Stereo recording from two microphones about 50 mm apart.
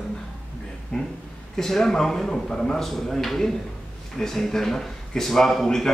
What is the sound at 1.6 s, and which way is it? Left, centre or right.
A man's voice, centre.